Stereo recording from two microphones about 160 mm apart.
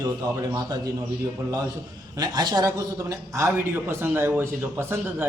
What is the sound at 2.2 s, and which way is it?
A man's voice, 25° right (ahead or behind).